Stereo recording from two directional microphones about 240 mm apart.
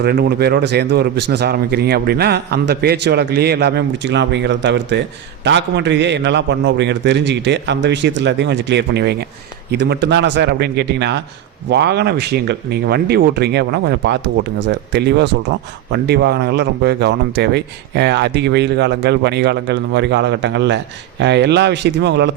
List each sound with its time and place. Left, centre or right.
0.0 s speech: right